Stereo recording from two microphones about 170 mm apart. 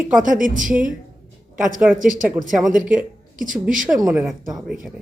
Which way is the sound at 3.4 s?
50° right (ahead or behind).